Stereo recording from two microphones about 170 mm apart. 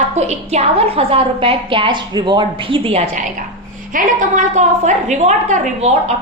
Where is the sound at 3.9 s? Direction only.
45° right (ahead or behind).